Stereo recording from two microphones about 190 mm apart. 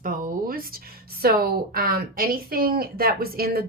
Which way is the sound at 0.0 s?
50° right (ahead or behind).